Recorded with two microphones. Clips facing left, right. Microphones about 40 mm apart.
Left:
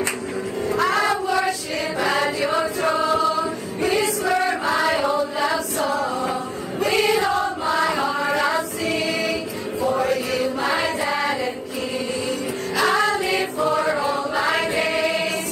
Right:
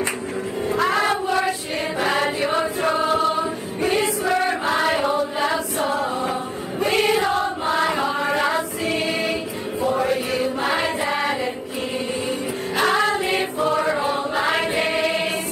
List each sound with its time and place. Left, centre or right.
0.7 s music: centre
0.9 s child singing: right
2.0 s music: centre
3.0 s choir: right
4.3 s choir: centre
5.8 s a sound: right
6.8 s choir: centre
7.2 s choir: right
8.2 s choir: centre
9.8 s chant: centre
10.3 s choir: right
12.8 s music: centre
13.1 s choir: right